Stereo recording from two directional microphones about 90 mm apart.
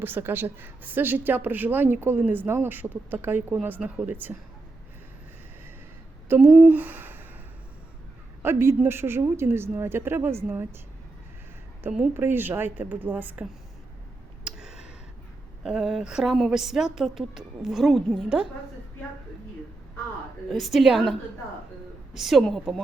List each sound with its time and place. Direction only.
0.0 s a woman's voice: 25° right (ahead or behind)
6.2 s a woman's voice: 25° right (ahead or behind)
8.4 s a woman's voice: 25° right (ahead or behind)
11.8 s a woman's voice: 15° right (ahead or behind)
14.4 s a sound: 5° right (ahead or behind)
15.6 s a woman's voice: 5° right (ahead or behind)
20.5 s a woman's voice: centre (ahead or behind)